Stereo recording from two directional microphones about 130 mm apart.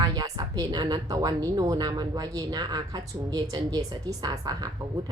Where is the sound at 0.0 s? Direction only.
30° right (ahead or behind).